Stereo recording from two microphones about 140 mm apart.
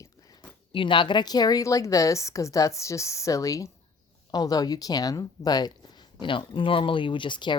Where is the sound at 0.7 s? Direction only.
35° left (ahead or behind).